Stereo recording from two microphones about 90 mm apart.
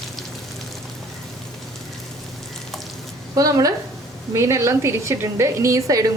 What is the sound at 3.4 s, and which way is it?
A woman's voice, 40° right (ahead or behind).